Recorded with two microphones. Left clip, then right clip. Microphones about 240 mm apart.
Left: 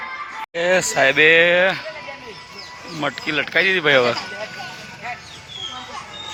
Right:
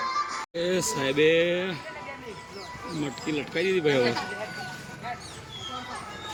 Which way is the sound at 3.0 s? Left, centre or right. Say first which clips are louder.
Left 10 dB; centre.